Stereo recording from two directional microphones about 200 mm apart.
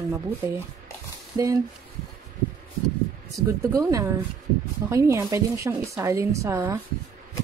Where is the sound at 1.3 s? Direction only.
15° right (ahead or behind).